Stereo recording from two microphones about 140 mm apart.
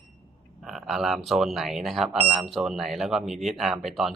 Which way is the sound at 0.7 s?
Centre (ahead or behind).